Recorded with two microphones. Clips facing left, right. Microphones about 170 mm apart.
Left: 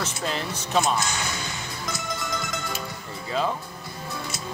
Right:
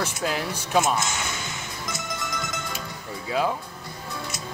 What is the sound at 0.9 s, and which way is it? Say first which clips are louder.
Speech: even; 20° right (ahead or behind).